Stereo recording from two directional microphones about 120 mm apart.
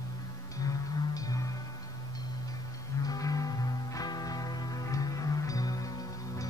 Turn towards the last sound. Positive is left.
turn(degrees=30)  # may be behind; listen again after turning